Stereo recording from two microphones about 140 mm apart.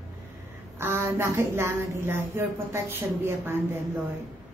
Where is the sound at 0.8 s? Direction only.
15° right (ahead or behind).